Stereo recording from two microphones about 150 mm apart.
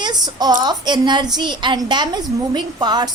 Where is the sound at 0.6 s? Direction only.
30° right (ahead or behind).